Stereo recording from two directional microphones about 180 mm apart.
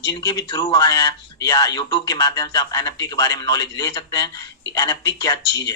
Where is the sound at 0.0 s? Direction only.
25° left (ahead or behind).